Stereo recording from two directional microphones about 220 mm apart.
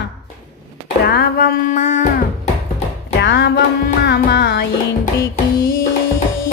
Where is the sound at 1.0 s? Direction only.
45° left (ahead or behind).